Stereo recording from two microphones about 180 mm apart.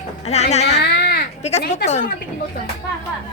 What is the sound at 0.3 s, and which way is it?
Speech, 40° left (ahead or behind).